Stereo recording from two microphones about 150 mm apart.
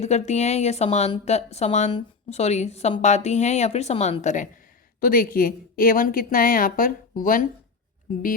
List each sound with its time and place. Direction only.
0.0 s a woman's voice: 50° left (ahead or behind)
4.9 s a woman's voice: 70° left (ahead or behind)